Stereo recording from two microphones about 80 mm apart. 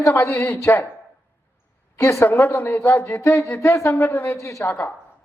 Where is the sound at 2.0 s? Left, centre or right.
Left.